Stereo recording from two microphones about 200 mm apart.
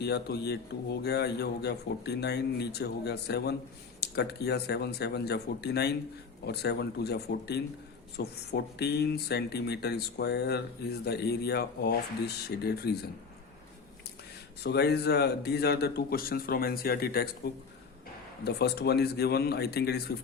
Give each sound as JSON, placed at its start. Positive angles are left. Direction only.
{"t": 0.0, "sound": "a man's voice", "side_deg": 55}
{"t": 14.6, "sound": "a man's voice", "side_deg": 55}